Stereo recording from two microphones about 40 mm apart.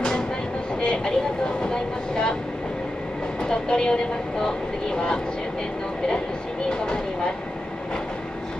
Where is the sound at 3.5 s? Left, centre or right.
Left.